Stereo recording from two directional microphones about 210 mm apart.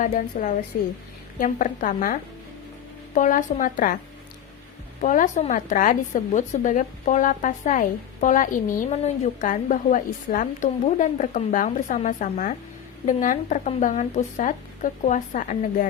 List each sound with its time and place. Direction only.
0.0 s a woman's voice: 40° left (ahead or behind)
3.2 s a woman's voice: 40° left (ahead or behind)
4.9 s a woman's voice: 35° left (ahead or behind)